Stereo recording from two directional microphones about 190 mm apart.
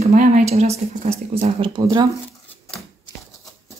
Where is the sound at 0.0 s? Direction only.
40° right (ahead or behind); by 2.0 s 20° right (ahead or behind).